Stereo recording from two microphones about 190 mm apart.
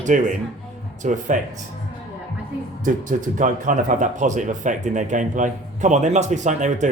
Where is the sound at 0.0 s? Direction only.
40° right (ahead or behind).